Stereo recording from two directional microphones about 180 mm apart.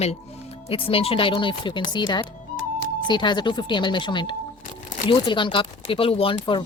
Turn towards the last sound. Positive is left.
turn(degrees=25)  # may be behind; listen again after turning